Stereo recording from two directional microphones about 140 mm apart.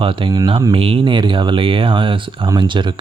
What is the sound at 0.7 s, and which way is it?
Speech, 45° right (ahead or behind).